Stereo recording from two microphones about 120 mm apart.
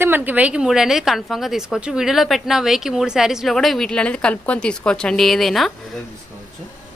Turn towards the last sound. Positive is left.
turn(degrees=0)  # may be behind; listen again after turning